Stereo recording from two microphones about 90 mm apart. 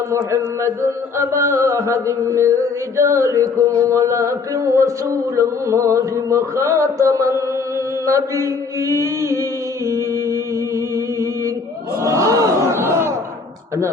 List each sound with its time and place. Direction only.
0.1 s mantra: 30° right (ahead or behind)
12.0 s crowd: 35° right (ahead or behind)